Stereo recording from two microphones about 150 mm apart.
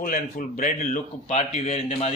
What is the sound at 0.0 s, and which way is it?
A man's voice, 65° left (ahead or behind).